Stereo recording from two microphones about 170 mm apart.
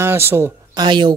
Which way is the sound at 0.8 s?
25° right (ahead or behind).